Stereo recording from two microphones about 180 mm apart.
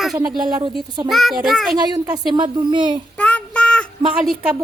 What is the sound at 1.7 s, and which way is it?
A woman's voice, 20° right (ahead or behind).